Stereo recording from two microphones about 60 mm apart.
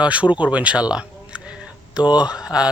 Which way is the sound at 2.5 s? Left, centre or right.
Centre.